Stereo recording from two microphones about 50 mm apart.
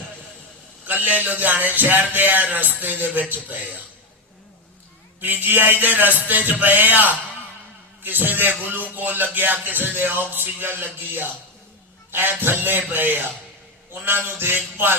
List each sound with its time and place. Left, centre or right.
0.9 s music: right
5.2 s music: right
12.4 s a sound: right